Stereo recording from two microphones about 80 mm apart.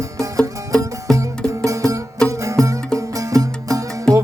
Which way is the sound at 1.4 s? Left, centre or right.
Right.